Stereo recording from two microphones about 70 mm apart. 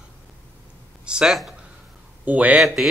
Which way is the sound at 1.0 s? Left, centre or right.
Centre.